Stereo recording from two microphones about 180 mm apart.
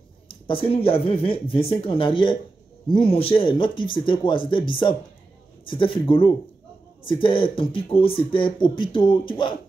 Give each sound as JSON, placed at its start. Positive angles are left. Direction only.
{"t": 0.3, "sound": "speech", "side_deg": 30}